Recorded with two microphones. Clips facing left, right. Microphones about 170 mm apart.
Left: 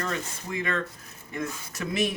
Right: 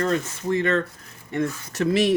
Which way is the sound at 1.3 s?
70° right (ahead or behind).